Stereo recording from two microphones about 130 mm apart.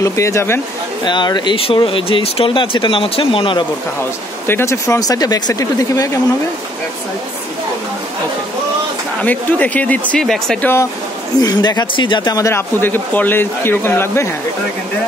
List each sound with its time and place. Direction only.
0.0 s speech: 25° left (ahead or behind)
1.0 s speech: 35° left (ahead or behind)
4.5 s speech: 20° left (ahead or behind)
9.2 s speech: 10° left (ahead or behind)
10.6 s speech: 20° left (ahead or behind)
11.4 s speech: 30° left (ahead or behind)